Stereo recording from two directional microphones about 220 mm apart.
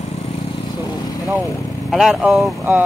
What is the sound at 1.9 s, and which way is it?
Speech, centre (ahead or behind).